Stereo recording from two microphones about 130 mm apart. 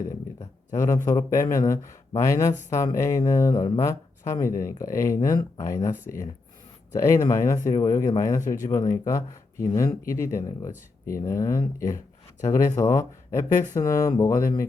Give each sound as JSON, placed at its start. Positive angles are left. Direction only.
{"t": 0.7, "sound": "speech", "side_deg": 30}
{"t": 7.3, "sound": "speech", "side_deg": 25}